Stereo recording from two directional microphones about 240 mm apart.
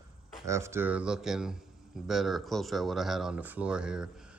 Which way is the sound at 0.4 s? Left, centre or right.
Centre.